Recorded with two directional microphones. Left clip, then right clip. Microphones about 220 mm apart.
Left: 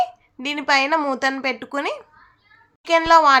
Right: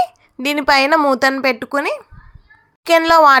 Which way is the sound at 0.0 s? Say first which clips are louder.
Right 4 dB; 35° right (ahead or behind).